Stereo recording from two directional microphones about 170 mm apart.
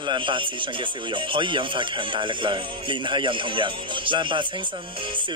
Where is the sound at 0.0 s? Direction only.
30° right (ahead or behind).